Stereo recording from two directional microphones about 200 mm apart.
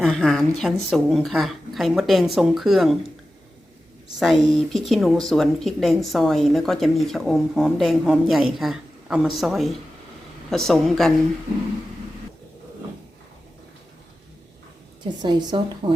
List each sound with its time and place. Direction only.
0.0 s speech: centre (ahead or behind)
4.2 s speech: centre (ahead or behind)
15.0 s a woman's voice: 20° right (ahead or behind)